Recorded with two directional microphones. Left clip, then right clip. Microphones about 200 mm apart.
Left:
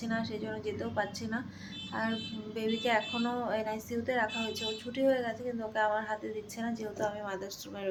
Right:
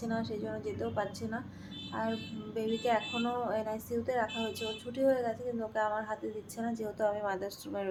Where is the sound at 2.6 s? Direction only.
5° right (ahead or behind).